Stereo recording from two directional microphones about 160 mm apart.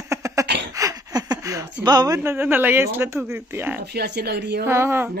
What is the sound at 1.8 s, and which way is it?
Speech, 25° right (ahead or behind).